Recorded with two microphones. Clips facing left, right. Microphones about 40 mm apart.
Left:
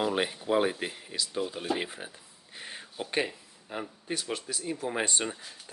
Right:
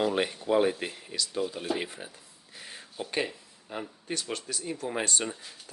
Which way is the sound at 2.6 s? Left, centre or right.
Centre.